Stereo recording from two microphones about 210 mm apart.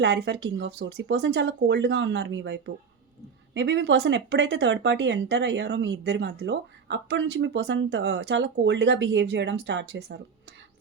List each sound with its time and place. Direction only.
0.0 s speech: 55° right (ahead or behind)